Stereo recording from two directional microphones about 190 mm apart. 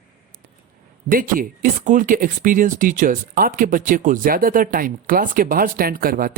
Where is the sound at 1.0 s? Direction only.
45° right (ahead or behind).